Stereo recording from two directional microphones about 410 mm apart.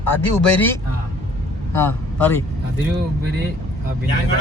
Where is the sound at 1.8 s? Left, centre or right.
Centre.